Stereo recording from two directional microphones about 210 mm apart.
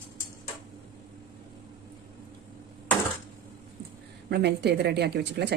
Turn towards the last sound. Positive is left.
turn(degrees=-55)  # may be behind; listen again after turning